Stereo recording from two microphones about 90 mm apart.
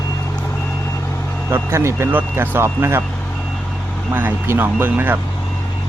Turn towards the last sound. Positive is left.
turn(degrees=-25)  # may be behind; listen again after turning